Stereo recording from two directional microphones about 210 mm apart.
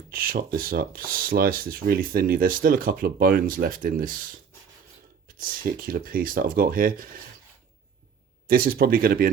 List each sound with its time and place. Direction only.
0.1 s speech: 45° right (ahead or behind)
5.4 s speech: 40° right (ahead or behind)
8.4 s speech: 45° right (ahead or behind)